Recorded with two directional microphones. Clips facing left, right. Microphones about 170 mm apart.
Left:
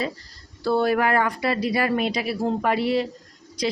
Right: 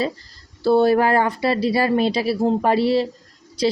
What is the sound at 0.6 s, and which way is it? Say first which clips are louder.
A woman's voice: right 5 dB; 25° right (ahead or behind).